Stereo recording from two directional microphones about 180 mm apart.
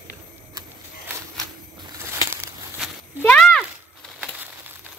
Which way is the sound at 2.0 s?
15° right (ahead or behind).